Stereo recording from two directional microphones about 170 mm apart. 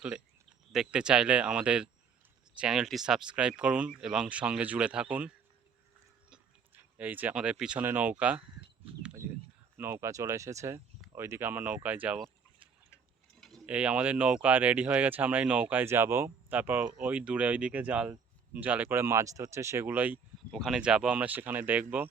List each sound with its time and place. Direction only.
0.7 s speech: 5° right (ahead or behind)
6.3 s speech: 10° right (ahead or behind)
9.7 s speech: 15° right (ahead or behind)
13.7 s speech: 5° right (ahead or behind)